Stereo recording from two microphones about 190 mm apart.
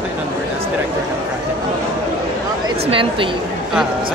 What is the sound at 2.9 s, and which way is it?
Speech, 25° right (ahead or behind).